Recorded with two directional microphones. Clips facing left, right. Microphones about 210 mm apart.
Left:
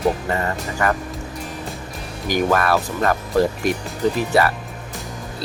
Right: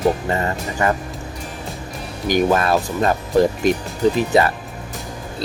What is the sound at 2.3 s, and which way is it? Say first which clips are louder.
Speech: right 2 dB; 20° right (ahead or behind).